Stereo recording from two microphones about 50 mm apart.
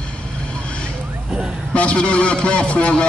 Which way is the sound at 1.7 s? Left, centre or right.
Left.